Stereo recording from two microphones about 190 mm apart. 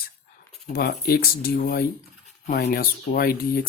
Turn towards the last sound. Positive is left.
turn(degrees=50)  # may be behind; listen again after turning